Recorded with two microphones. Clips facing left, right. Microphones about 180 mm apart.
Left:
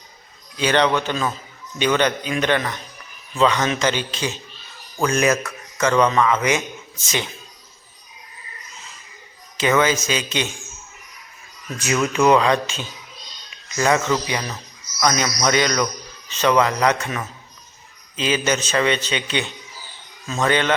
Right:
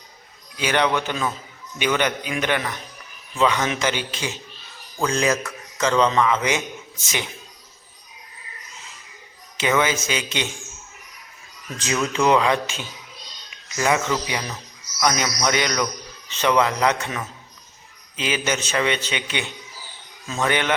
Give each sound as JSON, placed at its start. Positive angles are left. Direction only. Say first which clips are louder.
{"t": 0.5, "sound": "a man's voice", "louder": "left 3 dB", "side_deg": -10}
{"t": 9.6, "sound": "a man's voice", "louder": "left 3 dB", "side_deg": -15}
{"t": 11.8, "sound": "speech", "louder": "left 3 dB", "side_deg": 15}
{"t": 12.4, "sound": "a man's voice", "louder": "left 2 dB", "side_deg": -15}